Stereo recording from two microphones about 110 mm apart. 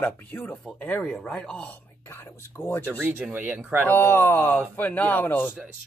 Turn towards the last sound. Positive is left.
turn(degrees=20)  # may be behind; listen again after turning